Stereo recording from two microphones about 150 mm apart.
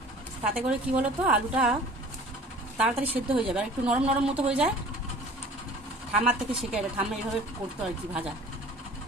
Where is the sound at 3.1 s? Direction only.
10° right (ahead or behind).